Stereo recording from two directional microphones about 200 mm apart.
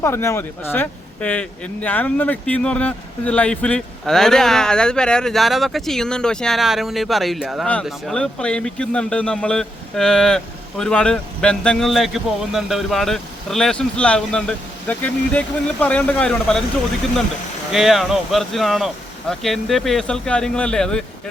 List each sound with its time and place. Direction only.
0.0 s a man's voice: 15° left (ahead or behind)
17.7 s a man's voice: centre (ahead or behind)